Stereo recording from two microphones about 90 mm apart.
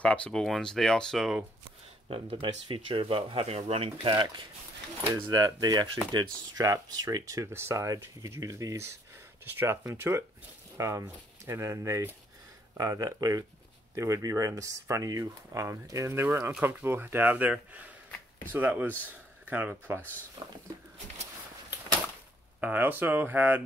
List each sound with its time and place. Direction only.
0.0 s speech: 15° left (ahead or behind)
2.0 s speech: 85° right; by 4.5 s 65° right (ahead or behind)
5.1 s speech: 45° right (ahead or behind)
9.9 s speech: 25° right (ahead or behind)
20.4 s speech: 70° right (ahead or behind)
22.6 s speech: 20° right (ahead or behind)